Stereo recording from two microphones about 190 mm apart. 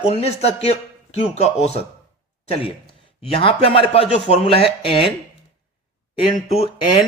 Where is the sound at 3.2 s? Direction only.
30° left (ahead or behind).